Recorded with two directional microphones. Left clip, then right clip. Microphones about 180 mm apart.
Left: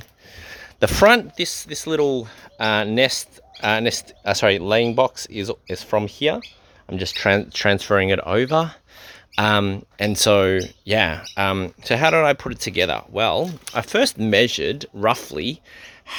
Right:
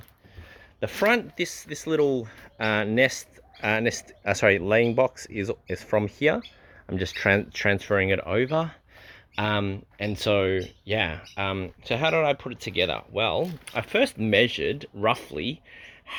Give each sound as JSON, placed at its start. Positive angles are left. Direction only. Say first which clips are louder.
{"t": 0.3, "sound": "a sound", "louder": "left 12 dB", "side_deg": 55}
{"t": 0.9, "sound": "speech", "louder": "left 8 dB", "side_deg": 30}
{"t": 6.1, "sound": "speech", "louder": "left 2 dB", "side_deg": 0}